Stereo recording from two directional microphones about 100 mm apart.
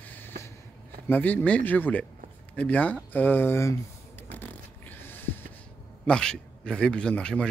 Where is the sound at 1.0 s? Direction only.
20° left (ahead or behind).